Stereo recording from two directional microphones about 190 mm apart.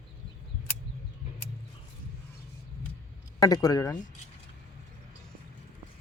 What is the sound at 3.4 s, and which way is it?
Speech, 20° left (ahead or behind).